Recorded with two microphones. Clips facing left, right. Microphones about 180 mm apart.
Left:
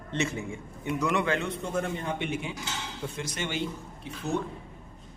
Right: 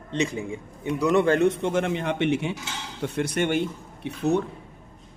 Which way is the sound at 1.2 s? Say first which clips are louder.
Right 9 dB; 45° right (ahead or behind).